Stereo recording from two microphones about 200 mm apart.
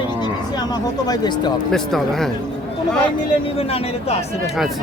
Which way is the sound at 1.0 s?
20° left (ahead or behind).